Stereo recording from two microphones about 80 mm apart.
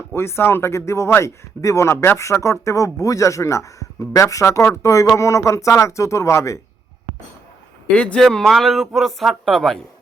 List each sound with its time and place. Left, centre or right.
0.1 s speech: left
7.9 s speech: centre